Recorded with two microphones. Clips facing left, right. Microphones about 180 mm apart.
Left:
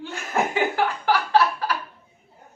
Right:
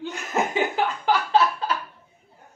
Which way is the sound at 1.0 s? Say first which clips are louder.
Even; 20° right (ahead or behind).